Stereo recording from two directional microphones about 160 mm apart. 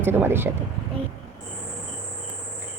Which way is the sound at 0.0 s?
15° right (ahead or behind).